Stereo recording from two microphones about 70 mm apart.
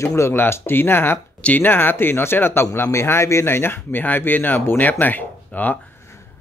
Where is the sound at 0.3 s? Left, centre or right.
Left.